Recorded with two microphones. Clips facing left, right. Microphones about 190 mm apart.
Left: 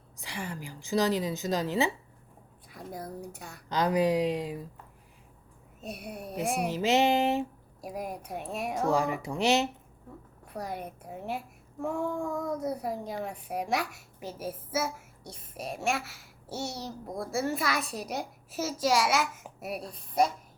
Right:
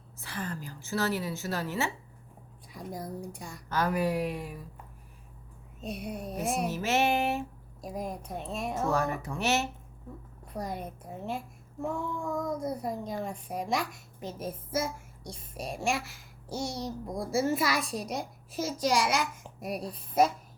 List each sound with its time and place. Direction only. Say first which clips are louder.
0.2 s a woman's voice: right 1 dB; 15° left (ahead or behind)
2.7 s a woman's voice: right 1 dB; 5° left (ahead or behind)
5.8 s a woman's voice: right 3 dB; 5° left (ahead or behind)
12.5 s a woman's voice: left 1 dB; 10° left (ahead or behind)